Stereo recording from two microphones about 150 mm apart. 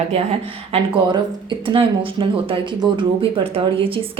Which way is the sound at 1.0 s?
30° right (ahead or behind).